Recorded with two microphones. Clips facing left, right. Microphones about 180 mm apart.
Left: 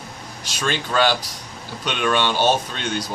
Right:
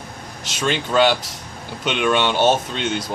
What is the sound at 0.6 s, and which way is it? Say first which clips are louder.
Speech: right 3 dB; 25° right (ahead or behind).